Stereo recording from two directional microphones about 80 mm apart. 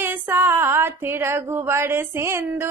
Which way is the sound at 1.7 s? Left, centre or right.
Right.